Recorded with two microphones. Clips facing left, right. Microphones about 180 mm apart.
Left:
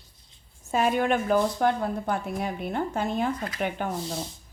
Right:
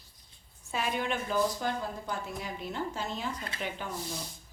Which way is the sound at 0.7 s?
50° left (ahead or behind).